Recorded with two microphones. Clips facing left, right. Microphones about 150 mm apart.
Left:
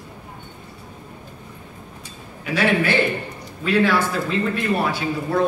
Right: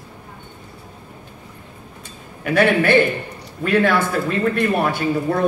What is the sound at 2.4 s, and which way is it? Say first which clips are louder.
Speech: right 4 dB; 55° right (ahead or behind).